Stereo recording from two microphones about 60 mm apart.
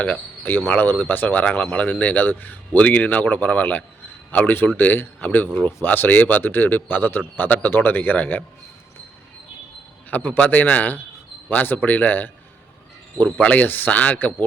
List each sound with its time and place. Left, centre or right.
0.4 s speech: left
10.1 s speech: left